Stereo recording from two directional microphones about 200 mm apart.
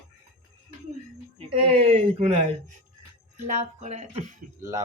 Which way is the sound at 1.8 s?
30° right (ahead or behind).